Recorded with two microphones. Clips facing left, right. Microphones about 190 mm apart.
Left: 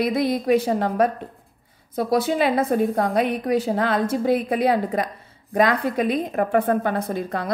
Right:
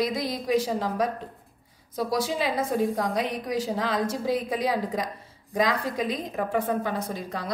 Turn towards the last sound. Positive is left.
turn(degrees=55)  # may be behind; listen again after turning